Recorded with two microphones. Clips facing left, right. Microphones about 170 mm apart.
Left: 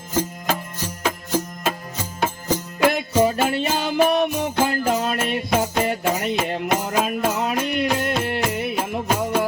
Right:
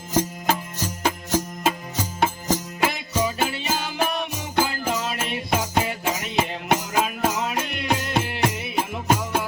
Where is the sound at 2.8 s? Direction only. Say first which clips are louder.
Left 10 dB; 55° left (ahead or behind).